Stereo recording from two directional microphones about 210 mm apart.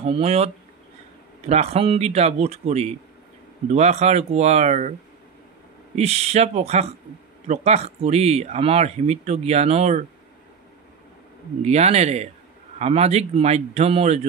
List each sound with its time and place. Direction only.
0.0 s speech: 30° right (ahead or behind)
1.5 s speech: 30° right (ahead or behind)
5.9 s speech: 30° right (ahead or behind)
11.6 s speech: 30° right (ahead or behind)